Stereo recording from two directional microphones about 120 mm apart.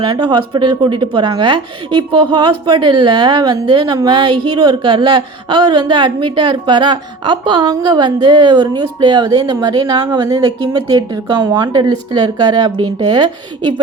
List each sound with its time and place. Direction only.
0.0 s a woman's voice: 40° right (ahead or behind)